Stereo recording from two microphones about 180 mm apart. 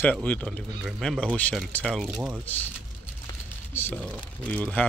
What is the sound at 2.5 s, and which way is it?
Speech, 10° left (ahead or behind).